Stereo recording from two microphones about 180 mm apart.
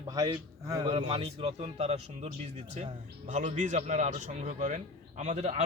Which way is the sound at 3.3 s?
40° right (ahead or behind).